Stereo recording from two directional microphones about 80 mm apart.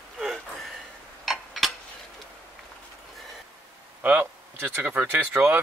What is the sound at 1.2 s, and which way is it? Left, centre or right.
Tick-tock, centre.